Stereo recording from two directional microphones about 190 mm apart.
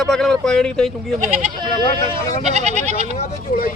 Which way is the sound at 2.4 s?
35° right (ahead or behind).